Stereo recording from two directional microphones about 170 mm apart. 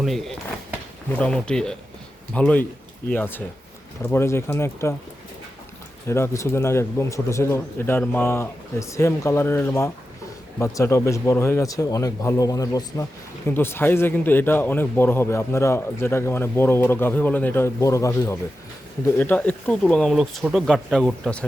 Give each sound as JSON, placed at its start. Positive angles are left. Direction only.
{"t": 0.0, "sound": "a man's voice", "side_deg": 0}
{"t": 6.1, "sound": "a man's voice", "side_deg": 15}